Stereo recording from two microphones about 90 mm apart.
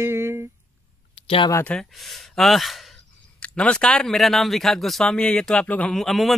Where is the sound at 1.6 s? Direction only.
10° left (ahead or behind).